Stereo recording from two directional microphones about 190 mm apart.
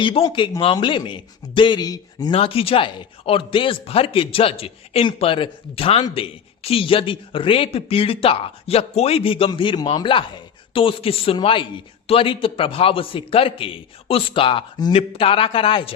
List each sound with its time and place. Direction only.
0.2 s a man's voice: 20° left (ahead or behind)